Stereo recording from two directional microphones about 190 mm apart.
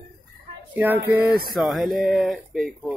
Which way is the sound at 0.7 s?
10° right (ahead or behind).